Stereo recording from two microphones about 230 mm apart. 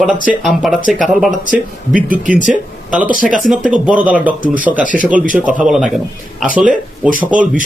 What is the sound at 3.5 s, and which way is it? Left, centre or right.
Speech, centre.